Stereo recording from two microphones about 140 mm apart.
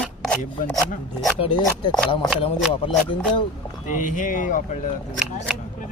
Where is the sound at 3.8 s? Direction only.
65° left (ahead or behind).